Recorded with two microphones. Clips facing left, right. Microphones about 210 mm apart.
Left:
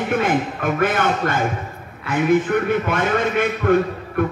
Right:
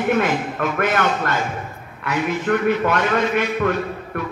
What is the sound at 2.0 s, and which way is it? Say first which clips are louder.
A man's voice: left 4 dB; 50° left (ahead or behind).